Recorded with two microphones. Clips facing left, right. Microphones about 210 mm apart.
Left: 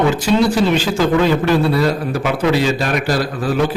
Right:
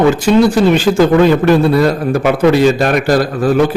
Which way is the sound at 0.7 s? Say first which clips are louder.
Right 6 dB; 50° right (ahead or behind).